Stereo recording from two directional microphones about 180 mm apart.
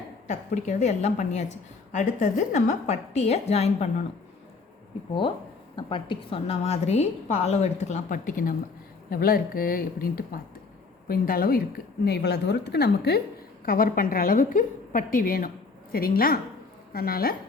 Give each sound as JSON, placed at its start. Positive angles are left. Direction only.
{"t": 0.3, "sound": "a woman's voice", "side_deg": 40}
{"t": 5.7, "sound": "a woman's voice", "side_deg": 25}
{"t": 12.0, "sound": "a woman's voice", "side_deg": 65}
{"t": 13.7, "sound": "a woman's voice", "side_deg": 50}